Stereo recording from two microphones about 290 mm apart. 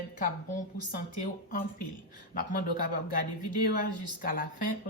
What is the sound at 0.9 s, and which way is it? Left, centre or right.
Speech, left.